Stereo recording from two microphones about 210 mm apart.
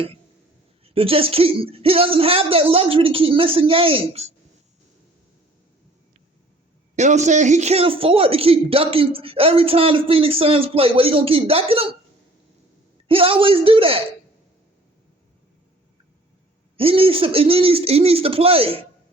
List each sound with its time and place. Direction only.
0.9 s a man's voice: 25° right (ahead or behind)
6.9 s a man's voice: 35° right (ahead or behind)
13.1 s a man's voice: 25° right (ahead or behind)
16.7 s a man's voice: 25° right (ahead or behind)